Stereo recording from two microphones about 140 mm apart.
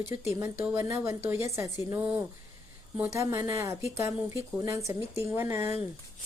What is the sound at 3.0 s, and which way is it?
Speech, 20° right (ahead or behind).